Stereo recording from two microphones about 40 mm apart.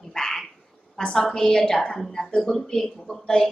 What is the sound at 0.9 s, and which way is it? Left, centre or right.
A woman's voice, centre.